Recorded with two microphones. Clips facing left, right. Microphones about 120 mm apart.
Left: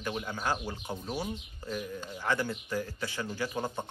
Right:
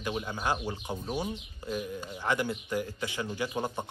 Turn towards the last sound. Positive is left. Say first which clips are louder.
# right 1 dB
turn(degrees=-15)  # may be behind; listen again after turning